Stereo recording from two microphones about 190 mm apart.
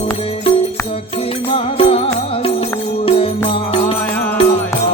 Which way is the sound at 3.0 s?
30° left (ahead or behind).